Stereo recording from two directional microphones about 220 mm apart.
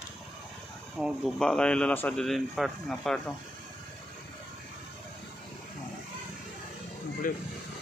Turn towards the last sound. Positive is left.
turn(degrees=40)  # may be behind; listen again after turning